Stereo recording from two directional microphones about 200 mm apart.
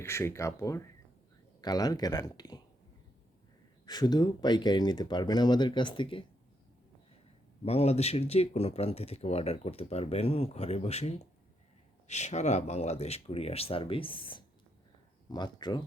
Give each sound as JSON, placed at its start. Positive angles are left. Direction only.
{"t": 0.0, "sound": "speech", "side_deg": 15}
{"t": 3.8, "sound": "speech", "side_deg": 20}
{"t": 7.6, "sound": "speech", "side_deg": 30}